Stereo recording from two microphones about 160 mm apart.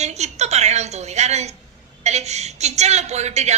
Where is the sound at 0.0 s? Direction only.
45° right (ahead or behind).